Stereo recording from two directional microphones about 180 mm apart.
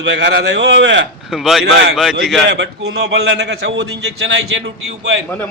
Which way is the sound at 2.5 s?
70° right (ahead or behind).